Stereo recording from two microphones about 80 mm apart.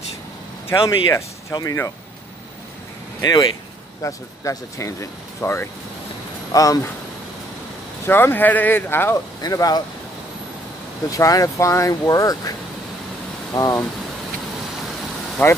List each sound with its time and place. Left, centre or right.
0.8 s speech: left
3.2 s speech: left
4.0 s speech: left
6.5 s speech: left
8.0 s speech: left
9.4 s speech: left
11.1 s speech: left
13.5 s speech: left
15.4 s speech: left